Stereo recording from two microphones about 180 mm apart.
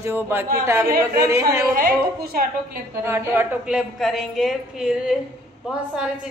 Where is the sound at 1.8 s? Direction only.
55° right (ahead or behind).